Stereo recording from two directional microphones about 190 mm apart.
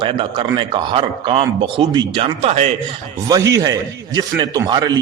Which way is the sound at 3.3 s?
20° right (ahead or behind).